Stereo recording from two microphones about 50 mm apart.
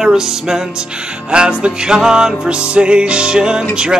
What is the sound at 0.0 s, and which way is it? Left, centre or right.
Music, centre.